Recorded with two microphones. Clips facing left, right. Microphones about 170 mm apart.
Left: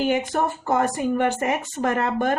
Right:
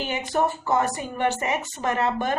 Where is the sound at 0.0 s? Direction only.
50° left (ahead or behind).